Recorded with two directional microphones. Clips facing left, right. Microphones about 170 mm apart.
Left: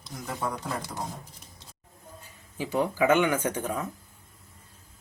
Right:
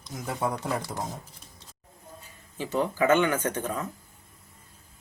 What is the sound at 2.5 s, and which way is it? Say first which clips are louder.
Speech: even; 10° left (ahead or behind).